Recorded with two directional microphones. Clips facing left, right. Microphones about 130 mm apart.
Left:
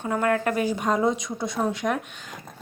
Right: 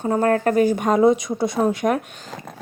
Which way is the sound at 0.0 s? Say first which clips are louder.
Right 5 dB; 35° right (ahead or behind).